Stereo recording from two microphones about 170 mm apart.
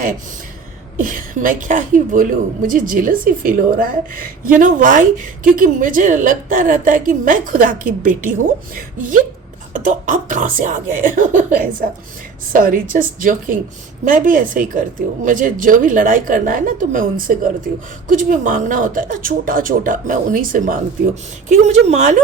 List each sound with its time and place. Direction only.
0.9 s a woman's voice: 55° right (ahead or behind)
21.5 s a woman's voice: 40° right (ahead or behind)